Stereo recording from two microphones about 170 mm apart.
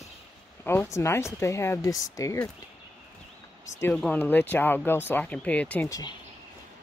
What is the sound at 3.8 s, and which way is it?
Speech, 10° left (ahead or behind).